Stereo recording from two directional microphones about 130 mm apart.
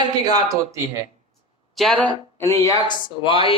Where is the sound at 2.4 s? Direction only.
25° left (ahead or behind).